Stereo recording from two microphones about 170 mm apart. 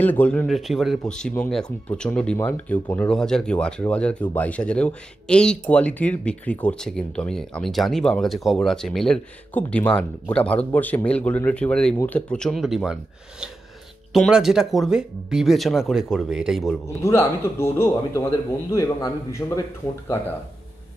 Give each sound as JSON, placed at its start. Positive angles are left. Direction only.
{"t": 0.0, "sound": "speech", "side_deg": 10}
{"t": 14.1, "sound": "speech", "side_deg": 0}
{"t": 16.8, "sound": "speech", "side_deg": 15}